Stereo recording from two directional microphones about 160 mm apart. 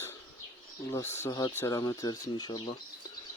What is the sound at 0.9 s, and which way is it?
Speech, 15° left (ahead or behind).